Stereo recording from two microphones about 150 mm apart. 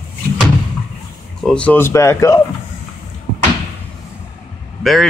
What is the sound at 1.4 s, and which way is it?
Speech, 5° left (ahead or behind).